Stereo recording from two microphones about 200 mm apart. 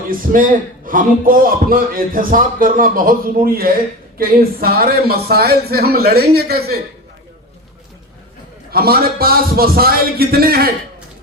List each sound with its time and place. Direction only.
0.1 s speech: 45° right (ahead or behind)
8.7 s speech: 50° right (ahead or behind)